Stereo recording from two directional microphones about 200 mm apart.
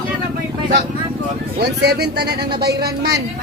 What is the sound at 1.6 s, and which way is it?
Speech, 55° right (ahead or behind).